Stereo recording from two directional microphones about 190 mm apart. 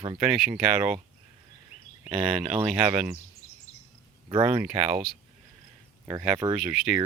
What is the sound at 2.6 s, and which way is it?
Speech, 5° right (ahead or behind).